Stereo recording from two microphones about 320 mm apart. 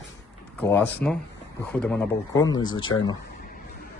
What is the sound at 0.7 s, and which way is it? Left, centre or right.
A man's voice, centre.